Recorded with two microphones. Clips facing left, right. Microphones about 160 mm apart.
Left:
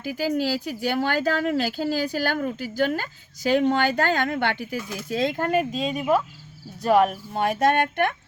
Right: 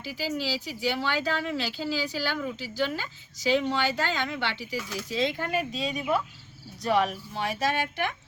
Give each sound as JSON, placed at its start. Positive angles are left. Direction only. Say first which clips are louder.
{"t": 0.0, "sound": "speech", "louder": "left 7 dB", "side_deg": 50}